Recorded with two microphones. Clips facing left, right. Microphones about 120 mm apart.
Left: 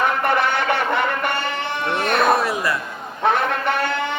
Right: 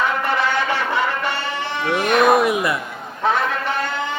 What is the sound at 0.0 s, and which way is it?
Music, 55° left (ahead or behind).